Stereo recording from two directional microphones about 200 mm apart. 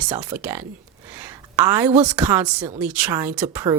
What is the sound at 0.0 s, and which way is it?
Speech, 5° right (ahead or behind).